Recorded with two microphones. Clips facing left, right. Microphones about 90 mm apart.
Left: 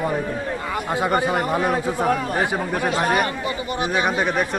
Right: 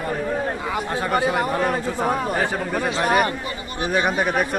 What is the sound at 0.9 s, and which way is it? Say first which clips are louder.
Speech: left 5 dB; 10° left (ahead or behind).